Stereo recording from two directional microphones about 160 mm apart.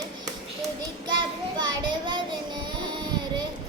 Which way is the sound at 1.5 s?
25° right (ahead or behind).